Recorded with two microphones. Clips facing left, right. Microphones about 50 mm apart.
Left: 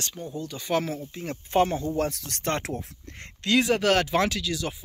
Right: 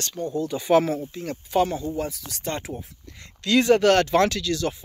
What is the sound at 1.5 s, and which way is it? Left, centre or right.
Speech, left.